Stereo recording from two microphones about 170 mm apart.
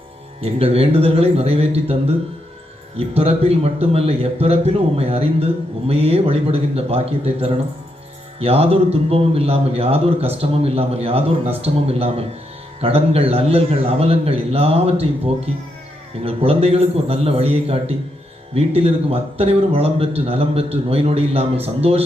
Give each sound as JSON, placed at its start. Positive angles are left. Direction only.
{"t": 0.4, "sound": "a man's voice", "side_deg": -35}